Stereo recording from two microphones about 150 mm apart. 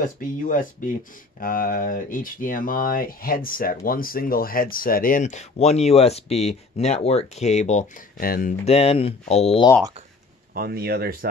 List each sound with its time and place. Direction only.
0.0 s speech: 65° left (ahead or behind); by 7.8 s 50° left (ahead or behind)
8.2 s speech: 75° left (ahead or behind)
8.6 s speech: 45° left (ahead or behind)
10.5 s speech: 90° right